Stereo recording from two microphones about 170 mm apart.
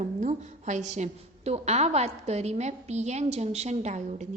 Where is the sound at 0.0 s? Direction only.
45° right (ahead or behind).